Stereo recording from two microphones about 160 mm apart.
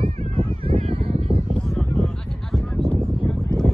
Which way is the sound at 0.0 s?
40° right (ahead or behind).